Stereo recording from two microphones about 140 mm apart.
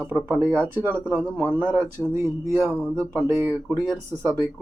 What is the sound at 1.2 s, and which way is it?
Speech, 10° left (ahead or behind).